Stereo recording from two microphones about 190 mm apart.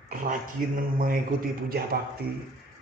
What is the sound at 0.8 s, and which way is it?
Speech, 45° right (ahead or behind).